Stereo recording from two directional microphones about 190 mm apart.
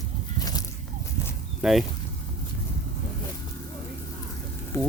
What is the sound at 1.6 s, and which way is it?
Speech, 5° right (ahead or behind).